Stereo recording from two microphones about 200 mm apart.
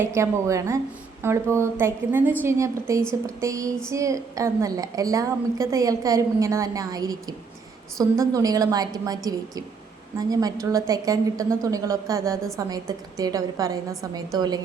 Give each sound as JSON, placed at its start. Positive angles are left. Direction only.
{"t": 0.0, "sound": "a woman's voice", "side_deg": -15}